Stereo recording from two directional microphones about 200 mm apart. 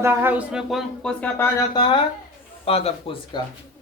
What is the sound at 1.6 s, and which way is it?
Speech, 25° left (ahead or behind).